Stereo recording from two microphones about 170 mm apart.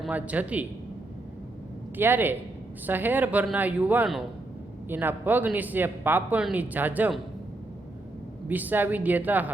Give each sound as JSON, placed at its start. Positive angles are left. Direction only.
{"t": 0.0, "sound": "speech", "side_deg": -10}
{"t": 2.0, "sound": "speech", "side_deg": -10}
{"t": 8.4, "sound": "speech", "side_deg": -10}